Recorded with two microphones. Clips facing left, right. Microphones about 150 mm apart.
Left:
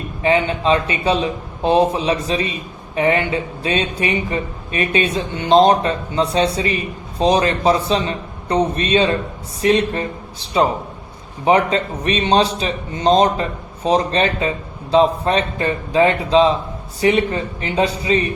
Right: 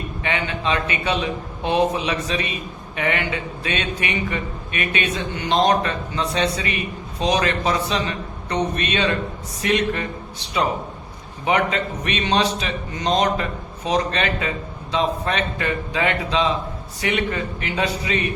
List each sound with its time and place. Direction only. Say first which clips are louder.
0.2 s a man's voice: left 9 dB; 35° left (ahead or behind)